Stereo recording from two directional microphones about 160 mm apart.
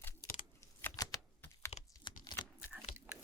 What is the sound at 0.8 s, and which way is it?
Computer keyboard, 15° left (ahead or behind).